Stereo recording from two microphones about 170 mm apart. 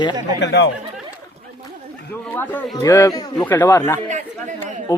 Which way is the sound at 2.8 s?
20° left (ahead or behind).